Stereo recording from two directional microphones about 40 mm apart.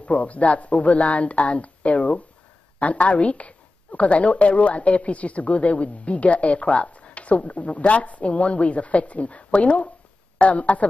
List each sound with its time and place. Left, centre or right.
0.0 s a woman's voice: left